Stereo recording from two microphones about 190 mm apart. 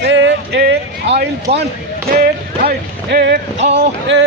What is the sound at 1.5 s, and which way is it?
Speech, 35° right (ahead or behind).